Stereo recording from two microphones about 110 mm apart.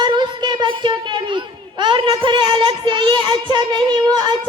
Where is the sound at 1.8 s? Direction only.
45° right (ahead or behind).